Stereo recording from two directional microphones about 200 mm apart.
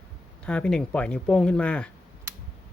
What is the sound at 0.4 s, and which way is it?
Speech, 5° left (ahead or behind).